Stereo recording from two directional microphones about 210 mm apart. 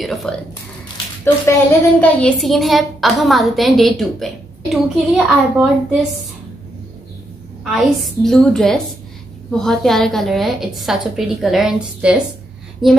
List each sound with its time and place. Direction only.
0.0 s a child's voice: centre (ahead or behind)
1.2 s a child's voice: 10° left (ahead or behind)
7.7 s a child's voice: centre (ahead or behind)